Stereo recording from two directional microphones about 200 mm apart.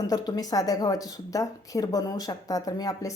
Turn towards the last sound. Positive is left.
turn(degrees=20)  # may be behind; listen again after turning